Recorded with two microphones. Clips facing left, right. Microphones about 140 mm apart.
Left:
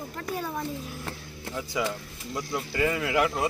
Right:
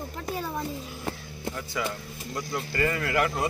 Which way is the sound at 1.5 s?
15° left (ahead or behind).